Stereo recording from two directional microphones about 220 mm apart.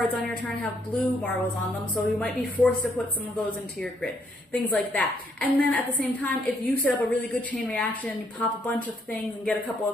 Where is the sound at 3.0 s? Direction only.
Centre (ahead or behind).